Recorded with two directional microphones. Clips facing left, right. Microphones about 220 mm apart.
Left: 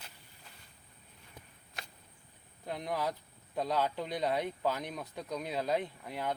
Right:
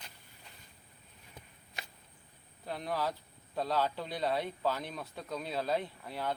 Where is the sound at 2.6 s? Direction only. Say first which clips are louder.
Even; 20° left (ahead or behind).